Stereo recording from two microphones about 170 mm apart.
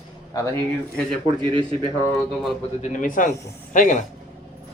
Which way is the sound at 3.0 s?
50° left (ahead or behind).